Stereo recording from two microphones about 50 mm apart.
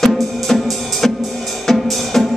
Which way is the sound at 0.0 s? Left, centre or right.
Centre.